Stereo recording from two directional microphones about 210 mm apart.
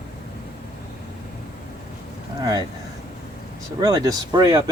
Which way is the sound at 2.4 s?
20° right (ahead or behind).